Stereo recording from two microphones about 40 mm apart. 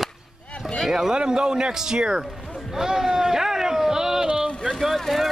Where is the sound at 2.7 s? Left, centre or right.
Centre.